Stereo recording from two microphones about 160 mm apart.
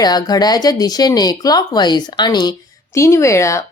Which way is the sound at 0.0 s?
25° left (ahead or behind).